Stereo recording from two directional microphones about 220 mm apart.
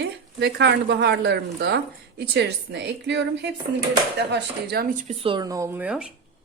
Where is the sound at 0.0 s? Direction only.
50° right (ahead or behind).